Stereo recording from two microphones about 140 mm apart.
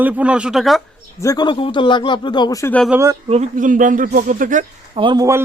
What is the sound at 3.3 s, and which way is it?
Speech, 60° right (ahead or behind).